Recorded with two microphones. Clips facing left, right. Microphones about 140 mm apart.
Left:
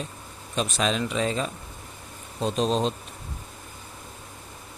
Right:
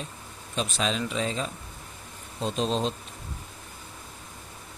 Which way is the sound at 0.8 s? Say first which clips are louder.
Left 3 dB; 65° left (ahead or behind).